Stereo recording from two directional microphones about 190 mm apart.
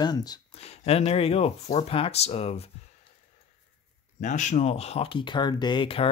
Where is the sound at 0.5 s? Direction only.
35° left (ahead or behind).